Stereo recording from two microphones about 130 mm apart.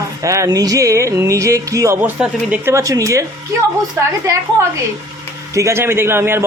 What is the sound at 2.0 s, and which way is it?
Speech, 10° right (ahead or behind).